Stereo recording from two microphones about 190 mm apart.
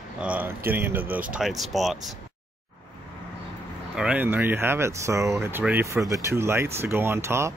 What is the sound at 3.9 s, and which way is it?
Speech, 5° right (ahead or behind).